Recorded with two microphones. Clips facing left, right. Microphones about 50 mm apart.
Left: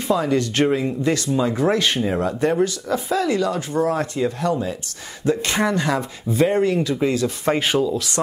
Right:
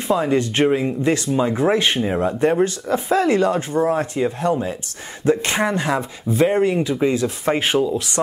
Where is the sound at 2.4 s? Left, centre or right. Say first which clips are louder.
Right 3 dB; right.